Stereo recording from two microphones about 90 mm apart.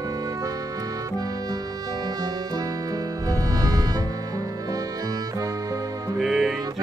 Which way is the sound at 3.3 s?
45° right (ahead or behind).